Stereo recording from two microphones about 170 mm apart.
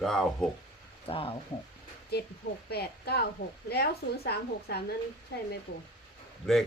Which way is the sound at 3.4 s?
55° left (ahead or behind).